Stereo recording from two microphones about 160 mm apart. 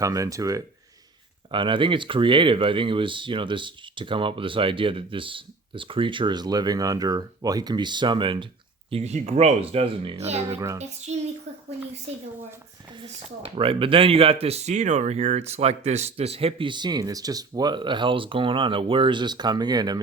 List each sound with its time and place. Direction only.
0.0 s speech: 20° right (ahead or behind)
1.5 s speech: 30° right (ahead or behind)
8.9 s a woman's voice: 40° right (ahead or behind)
13.0 s speech: 35° right (ahead or behind)